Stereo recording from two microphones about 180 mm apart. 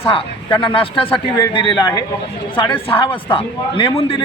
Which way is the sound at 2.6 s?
30° left (ahead or behind).